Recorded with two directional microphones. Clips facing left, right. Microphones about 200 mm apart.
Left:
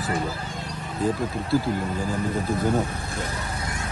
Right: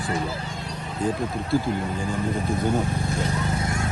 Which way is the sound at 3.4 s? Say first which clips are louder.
Right 6 dB; 25° right (ahead or behind).